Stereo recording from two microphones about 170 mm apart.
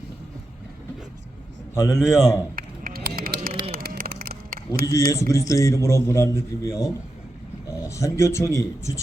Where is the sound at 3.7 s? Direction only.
60° right (ahead or behind).